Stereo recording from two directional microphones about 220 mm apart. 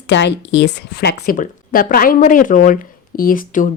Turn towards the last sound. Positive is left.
turn(degrees=40)  # may be behind; listen again after turning